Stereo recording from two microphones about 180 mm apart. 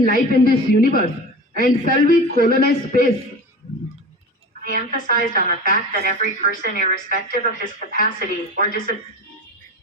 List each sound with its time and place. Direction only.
0.0 s a man's voice: 55° left (ahead or behind)
4.6 s a man's voice: 50° left (ahead or behind)